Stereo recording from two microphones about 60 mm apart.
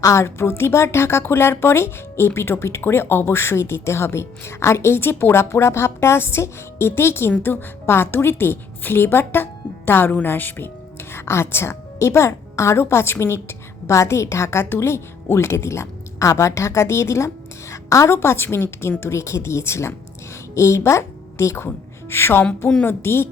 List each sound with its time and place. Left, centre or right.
0.0 s a woman's voice: left
0.3 s a woman's voice: left
11.1 s a woman's voice: left